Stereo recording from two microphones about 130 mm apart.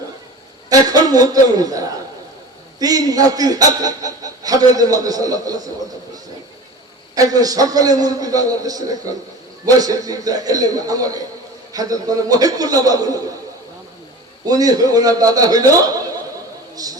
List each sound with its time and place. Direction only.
0.7 s a man's voice: 30° right (ahead or behind)
7.2 s a man's voice: 30° right (ahead or behind)
14.4 s a man's voice: 30° right (ahead or behind)